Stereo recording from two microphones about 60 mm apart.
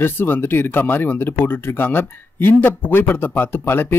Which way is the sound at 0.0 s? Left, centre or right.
Left.